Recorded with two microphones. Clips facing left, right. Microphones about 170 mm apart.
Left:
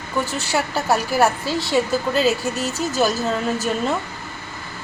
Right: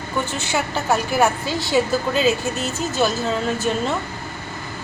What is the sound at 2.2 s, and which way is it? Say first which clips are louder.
Speech: even; 40° left (ahead or behind).